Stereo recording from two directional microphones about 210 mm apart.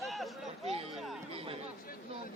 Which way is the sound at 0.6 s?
30° right (ahead or behind).